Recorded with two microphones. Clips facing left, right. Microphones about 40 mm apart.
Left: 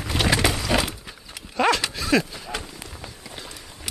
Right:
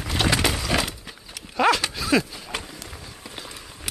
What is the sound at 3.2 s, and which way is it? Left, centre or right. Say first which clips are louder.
Run: right 1 dB; centre.